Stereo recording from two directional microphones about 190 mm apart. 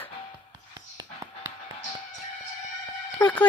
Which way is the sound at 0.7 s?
20° right (ahead or behind).